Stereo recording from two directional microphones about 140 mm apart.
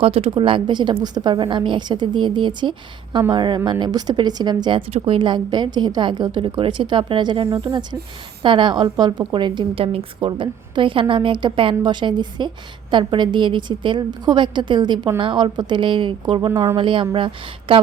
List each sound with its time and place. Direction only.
0.0 s a woman's voice: 40° right (ahead or behind)
4.9 s a woman's voice: 40° right (ahead or behind)